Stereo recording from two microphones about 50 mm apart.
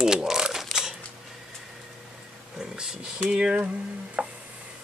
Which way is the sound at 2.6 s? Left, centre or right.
Centre.